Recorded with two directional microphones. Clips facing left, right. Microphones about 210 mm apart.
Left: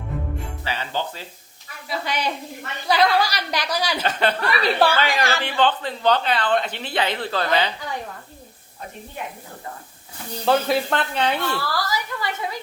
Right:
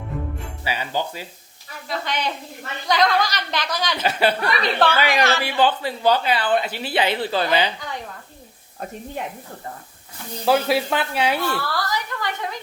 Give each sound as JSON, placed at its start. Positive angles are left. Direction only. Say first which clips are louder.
{"t": 0.6, "sound": "speech", "louder": "right 3 dB", "side_deg": -10}
{"t": 1.9, "sound": "a woman's voice", "louder": "even", "side_deg": 10}
{"t": 4.0, "sound": "speech", "louder": "right 5 dB", "side_deg": -10}
{"t": 4.6, "sound": "a woman's voice", "louder": "left 2 dB", "side_deg": 10}
{"t": 4.9, "sound": "speech", "louder": "right 2 dB", "side_deg": -15}
{"t": 10.4, "sound": "a woman's voice", "louder": "right 1 dB", "side_deg": -5}